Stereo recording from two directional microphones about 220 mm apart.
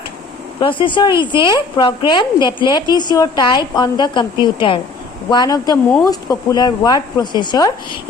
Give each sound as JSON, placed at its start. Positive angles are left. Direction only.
{"t": 0.6, "sound": "a woman's voice", "side_deg": 20}